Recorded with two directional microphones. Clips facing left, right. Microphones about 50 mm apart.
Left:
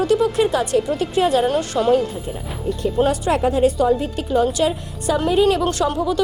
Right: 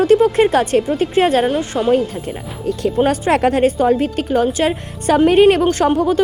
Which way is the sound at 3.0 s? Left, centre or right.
Right.